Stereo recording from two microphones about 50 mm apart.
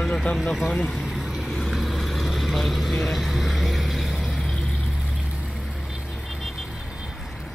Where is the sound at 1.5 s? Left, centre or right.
Centre.